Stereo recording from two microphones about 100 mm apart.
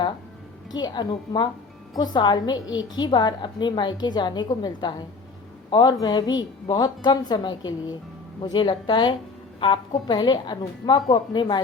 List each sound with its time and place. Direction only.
0.7 s a woman's voice: 45° left (ahead or behind)